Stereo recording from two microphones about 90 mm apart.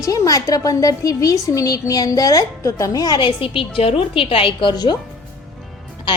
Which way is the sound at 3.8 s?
90° left.